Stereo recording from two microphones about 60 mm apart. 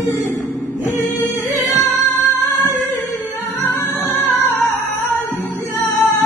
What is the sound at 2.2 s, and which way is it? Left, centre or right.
Music, right.